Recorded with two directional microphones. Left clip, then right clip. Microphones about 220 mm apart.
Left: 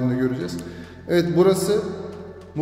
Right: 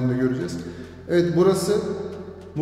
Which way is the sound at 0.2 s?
15° left (ahead or behind).